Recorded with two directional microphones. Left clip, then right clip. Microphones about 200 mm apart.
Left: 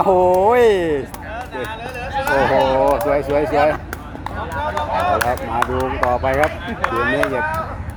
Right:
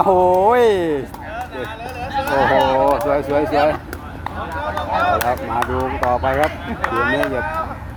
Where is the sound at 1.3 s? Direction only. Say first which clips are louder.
Even; 15° left (ahead or behind).